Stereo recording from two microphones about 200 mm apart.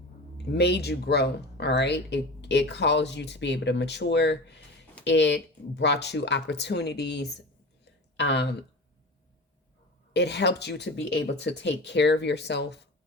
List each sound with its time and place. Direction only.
0.5 s speech: 55° left (ahead or behind)
10.1 s speech: 60° left (ahead or behind)